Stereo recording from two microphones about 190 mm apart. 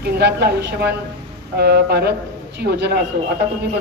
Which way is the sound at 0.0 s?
60° right (ahead or behind).